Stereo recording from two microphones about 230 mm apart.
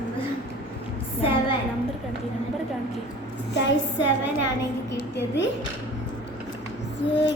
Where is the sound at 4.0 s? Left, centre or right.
Left.